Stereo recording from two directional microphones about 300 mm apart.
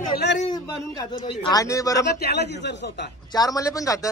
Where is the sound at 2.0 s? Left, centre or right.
Left.